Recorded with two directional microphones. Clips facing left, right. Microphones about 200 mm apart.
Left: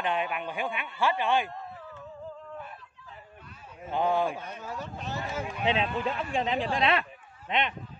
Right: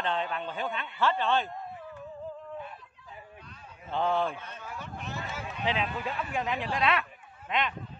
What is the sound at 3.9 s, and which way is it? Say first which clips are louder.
Speech: left 2 dB; 10° left (ahead or behind).